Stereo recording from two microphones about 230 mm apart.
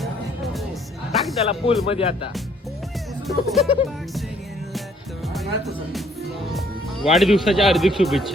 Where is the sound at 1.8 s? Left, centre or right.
Left.